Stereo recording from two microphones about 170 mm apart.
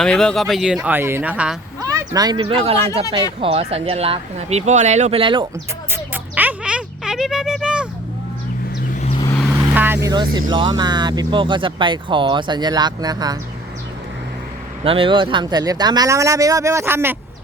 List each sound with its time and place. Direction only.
0.0 s speech: 5° left (ahead or behind)
0.8 s speech: 10° right (ahead or behind)
1.8 s speech: 20° right (ahead or behind)
5.9 s a sound: 10° right (ahead or behind)
9.0 s vehicle: 40° left (ahead or behind)
9.7 s vehicle: 10° right (ahead or behind)
10.1 s speech: 25° right (ahead or behind)
14.8 s speech: 30° right (ahead or behind); by 17.2 s 15° right (ahead or behind)